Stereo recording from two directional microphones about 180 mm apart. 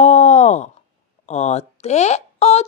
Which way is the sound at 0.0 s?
40° left (ahead or behind).